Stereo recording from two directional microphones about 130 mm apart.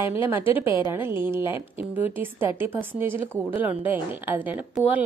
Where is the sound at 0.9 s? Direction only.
20° right (ahead or behind).